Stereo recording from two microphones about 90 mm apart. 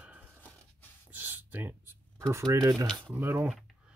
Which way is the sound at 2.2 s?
35° right (ahead or behind).